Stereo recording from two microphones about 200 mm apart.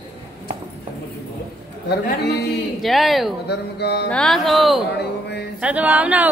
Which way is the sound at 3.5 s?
55° left (ahead or behind).